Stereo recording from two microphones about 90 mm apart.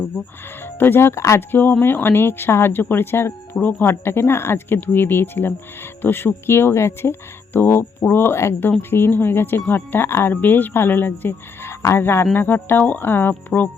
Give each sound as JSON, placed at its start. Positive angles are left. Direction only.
{"t": 0.8, "sound": "speech", "side_deg": 25}